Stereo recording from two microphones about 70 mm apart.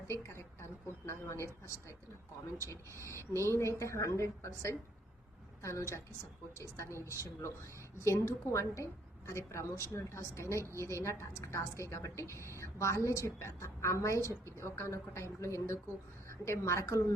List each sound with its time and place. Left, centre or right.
0.1 s a woman's voice: left